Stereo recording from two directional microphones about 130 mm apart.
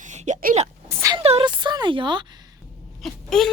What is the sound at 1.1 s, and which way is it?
A woman's voice, 45° right (ahead or behind).